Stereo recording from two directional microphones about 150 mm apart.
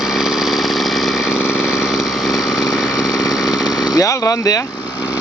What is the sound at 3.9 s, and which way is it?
Speech, 20° left (ahead or behind).